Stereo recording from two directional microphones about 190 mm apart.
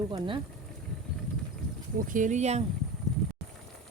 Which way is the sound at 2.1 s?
40° right (ahead or behind).